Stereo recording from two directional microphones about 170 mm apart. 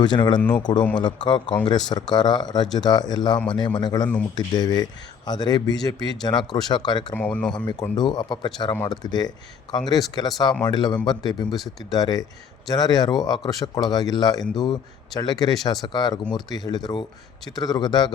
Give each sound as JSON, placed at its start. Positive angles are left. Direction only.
{"t": 0.0, "sound": "a man's voice", "side_deg": 25}
{"t": 7.1, "sound": "speech", "side_deg": 10}
{"t": 7.5, "sound": "a man's voice", "side_deg": 25}